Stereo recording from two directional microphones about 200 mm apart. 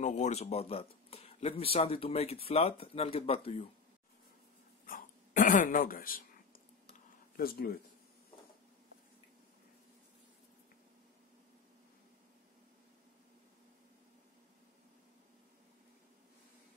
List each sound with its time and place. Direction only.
0.0 s speech: 35° left (ahead or behind)
4.8 s a sound: 45° left (ahead or behind)
7.3 s speech: 50° left (ahead or behind)